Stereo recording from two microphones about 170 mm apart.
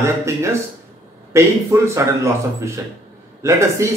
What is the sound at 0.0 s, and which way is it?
Speech, 15° right (ahead or behind).